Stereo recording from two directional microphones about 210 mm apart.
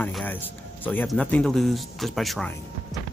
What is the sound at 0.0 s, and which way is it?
Speech, 10° left (ahead or behind).